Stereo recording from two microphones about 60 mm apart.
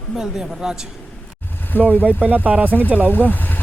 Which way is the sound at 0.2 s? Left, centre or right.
Centre.